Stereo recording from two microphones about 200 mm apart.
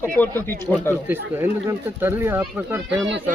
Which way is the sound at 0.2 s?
10° left (ahead or behind).